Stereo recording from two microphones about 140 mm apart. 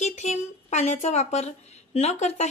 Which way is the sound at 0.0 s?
55° left (ahead or behind).